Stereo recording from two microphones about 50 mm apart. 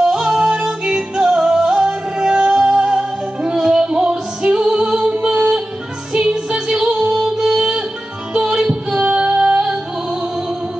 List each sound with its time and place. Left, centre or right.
0.0 s music: centre
5.1 s music: right